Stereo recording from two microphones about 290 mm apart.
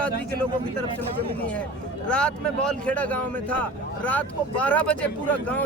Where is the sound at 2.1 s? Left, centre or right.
Centre.